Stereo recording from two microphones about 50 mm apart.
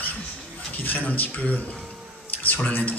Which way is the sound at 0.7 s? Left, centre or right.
Left.